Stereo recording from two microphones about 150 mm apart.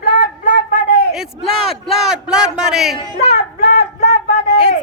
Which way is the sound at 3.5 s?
90° left.